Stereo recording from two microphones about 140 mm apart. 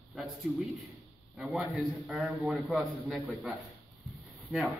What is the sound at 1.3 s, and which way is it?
A man's voice, 5° right (ahead or behind).